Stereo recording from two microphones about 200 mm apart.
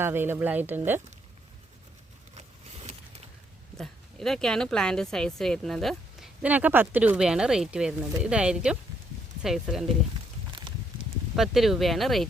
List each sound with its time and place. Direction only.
0.0 s speech: 10° right (ahead or behind)
2.3 s a sound: 35° right (ahead or behind)
3.8 s speech: centre (ahead or behind)
11.3 s speech: centre (ahead or behind)